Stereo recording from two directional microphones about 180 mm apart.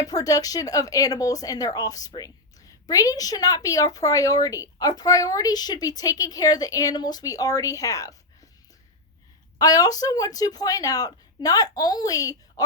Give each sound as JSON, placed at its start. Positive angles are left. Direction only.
{"t": 0.0, "sound": "speech", "side_deg": 20}
{"t": 9.6, "sound": "speech", "side_deg": 20}